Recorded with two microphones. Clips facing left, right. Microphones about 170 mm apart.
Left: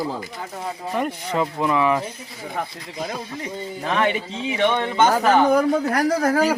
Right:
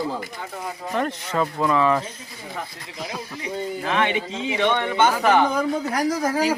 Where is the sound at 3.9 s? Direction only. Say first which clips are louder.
Left 2 dB; 40° left (ahead or behind).